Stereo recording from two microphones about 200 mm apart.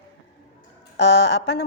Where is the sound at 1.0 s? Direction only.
60° left (ahead or behind).